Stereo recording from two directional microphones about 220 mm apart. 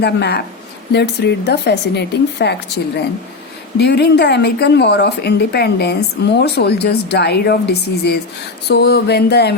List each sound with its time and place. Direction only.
0.0 s speech: 50° left (ahead or behind)